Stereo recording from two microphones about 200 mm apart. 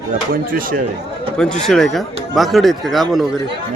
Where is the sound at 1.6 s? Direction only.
Centre (ahead or behind).